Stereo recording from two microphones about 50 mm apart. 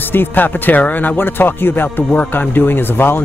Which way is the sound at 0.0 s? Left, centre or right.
Left.